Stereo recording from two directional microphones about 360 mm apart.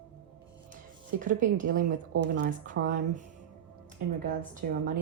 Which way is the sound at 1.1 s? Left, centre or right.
Right.